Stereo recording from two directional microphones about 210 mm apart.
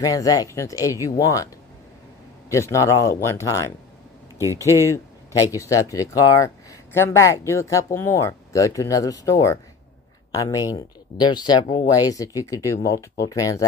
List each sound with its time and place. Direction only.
0.0 s speech: 15° left (ahead or behind)
2.5 s speech: 15° left (ahead or behind)